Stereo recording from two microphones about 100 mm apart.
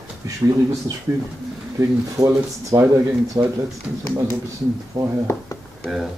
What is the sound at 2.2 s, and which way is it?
Speech, 35° right (ahead or behind).